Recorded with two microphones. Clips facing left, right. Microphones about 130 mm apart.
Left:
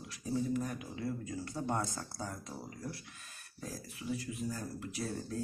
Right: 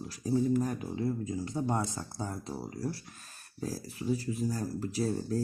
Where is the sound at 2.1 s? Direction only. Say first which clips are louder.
Right 5 dB; 30° right (ahead or behind).